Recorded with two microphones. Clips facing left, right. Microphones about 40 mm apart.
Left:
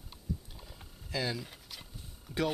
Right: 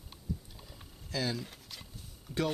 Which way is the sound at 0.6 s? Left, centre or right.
Centre.